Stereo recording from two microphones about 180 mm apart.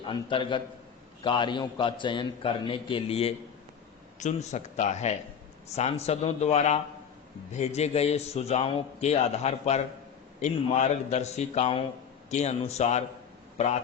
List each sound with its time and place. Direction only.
0.0 s a man's voice: 25° left (ahead or behind)